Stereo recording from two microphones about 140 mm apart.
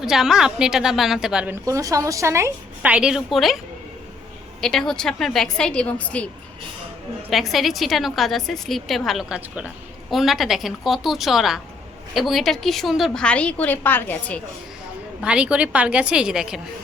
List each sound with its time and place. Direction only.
0.0 s a woman's voice: 5° right (ahead or behind)
1.6 s a woman's voice: 25° right (ahead or behind)
2.9 s a woman's voice: 5° right (ahead or behind)
4.6 s a woman's voice: 5° left (ahead or behind)
7.3 s a woman's voice: centre (ahead or behind)
15.2 s a woman's voice: 5° right (ahead or behind)